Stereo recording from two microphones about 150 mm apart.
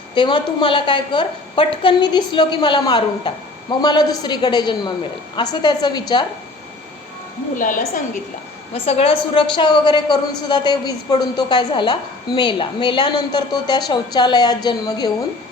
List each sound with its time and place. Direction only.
0.1 s a woman's voice: 35° left (ahead or behind)
7.5 s a woman's voice: 60° left (ahead or behind)
8.7 s a woman's voice: 40° left (ahead or behind)